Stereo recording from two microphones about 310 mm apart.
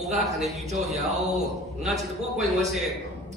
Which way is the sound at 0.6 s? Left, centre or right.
Right.